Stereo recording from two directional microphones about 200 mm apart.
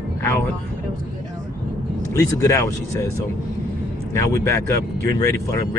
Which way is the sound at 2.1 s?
15° left (ahead or behind).